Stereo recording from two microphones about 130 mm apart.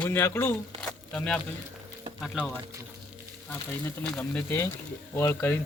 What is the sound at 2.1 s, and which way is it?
Speech, centre (ahead or behind).